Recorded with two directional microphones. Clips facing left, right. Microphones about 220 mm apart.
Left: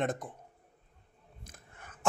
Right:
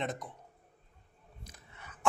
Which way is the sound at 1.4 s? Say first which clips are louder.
Even; 50° left (ahead or behind).